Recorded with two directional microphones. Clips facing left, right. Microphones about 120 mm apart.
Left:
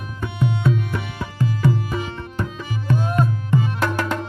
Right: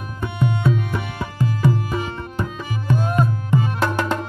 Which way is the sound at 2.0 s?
50° right (ahead or behind).